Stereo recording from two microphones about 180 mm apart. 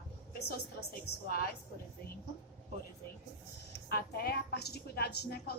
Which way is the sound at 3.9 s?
60° left (ahead or behind).